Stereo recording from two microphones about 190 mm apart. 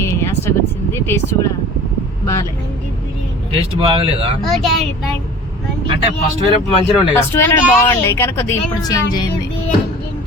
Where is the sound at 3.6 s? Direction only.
30° right (ahead or behind).